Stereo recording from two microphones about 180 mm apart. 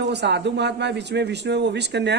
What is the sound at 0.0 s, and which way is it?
A man's voice, 70° right (ahead or behind).